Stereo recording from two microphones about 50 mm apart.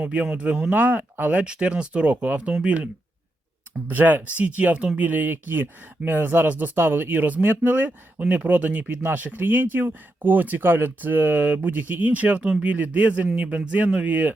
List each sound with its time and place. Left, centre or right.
0.0 s speech: right
0.7 s speech: right
1.4 s speech: right
12.4 s speech: centre
12.6 s speech: right